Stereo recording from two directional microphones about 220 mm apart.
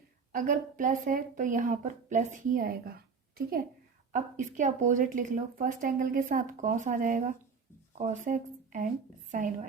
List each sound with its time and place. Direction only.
0.3 s a woman's voice: 35° right (ahead or behind)